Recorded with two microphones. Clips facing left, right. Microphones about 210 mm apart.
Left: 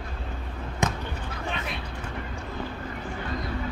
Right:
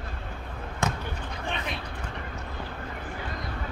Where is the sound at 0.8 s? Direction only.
20° left (ahead or behind).